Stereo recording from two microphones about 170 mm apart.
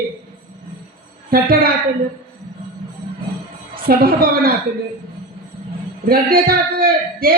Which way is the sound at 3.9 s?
60° right (ahead or behind).